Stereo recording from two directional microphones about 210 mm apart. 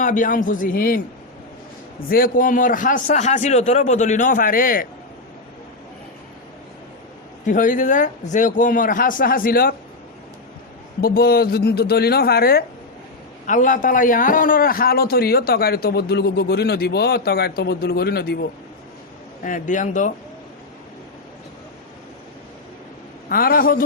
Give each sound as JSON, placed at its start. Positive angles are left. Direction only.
{"t": 0.0, "sound": "a man's voice", "side_deg": 40}
{"t": 2.0, "sound": "a man's voice", "side_deg": 45}
{"t": 7.4, "sound": "a man's voice", "side_deg": 40}
{"t": 11.0, "sound": "a man's voice", "side_deg": 45}
{"t": 23.3, "sound": "a man's voice", "side_deg": 45}